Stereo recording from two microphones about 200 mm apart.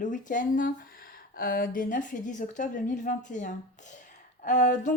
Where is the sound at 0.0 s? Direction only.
40° left (ahead or behind).